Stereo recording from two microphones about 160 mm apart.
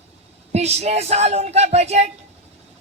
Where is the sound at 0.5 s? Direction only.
40° right (ahead or behind).